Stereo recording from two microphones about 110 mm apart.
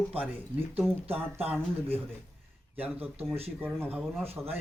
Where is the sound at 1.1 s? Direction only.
20° right (ahead or behind).